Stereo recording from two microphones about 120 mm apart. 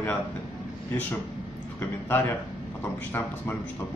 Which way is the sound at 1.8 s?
20° left (ahead or behind).